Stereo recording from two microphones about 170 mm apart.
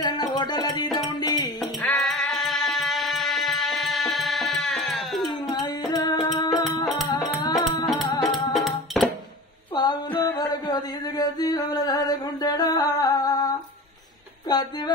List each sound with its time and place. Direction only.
0.0 s music: 25° left (ahead or behind)
1.8 s music: 5° left (ahead or behind)
5.5 s music: 25° left (ahead or behind)
9.0 s music: centre (ahead or behind)
9.8 s a sound: 25° left (ahead or behind)